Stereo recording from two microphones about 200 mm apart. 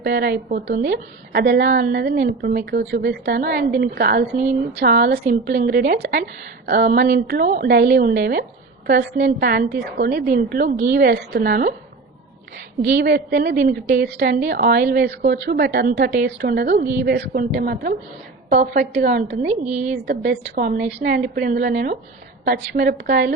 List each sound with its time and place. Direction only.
0.0 s a woman's voice: 50° right (ahead or behind)
13.1 s a woman's voice: 50° right (ahead or behind)
18.9 s a woman's voice: 55° right (ahead or behind)
19.5 s a woman's voice: 35° right (ahead or behind)
20.1 s a woman's voice: 45° right (ahead or behind)